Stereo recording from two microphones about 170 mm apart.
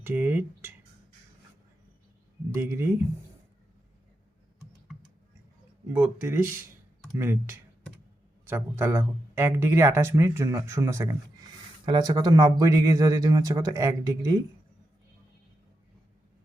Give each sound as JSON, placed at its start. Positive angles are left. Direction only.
{"t": 0.0, "sound": "speech", "side_deg": -10}
{"t": 2.5, "sound": "speech", "side_deg": -15}
{"t": 5.9, "sound": "speech", "side_deg": -15}